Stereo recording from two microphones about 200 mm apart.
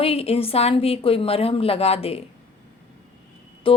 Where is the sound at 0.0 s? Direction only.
30° left (ahead or behind).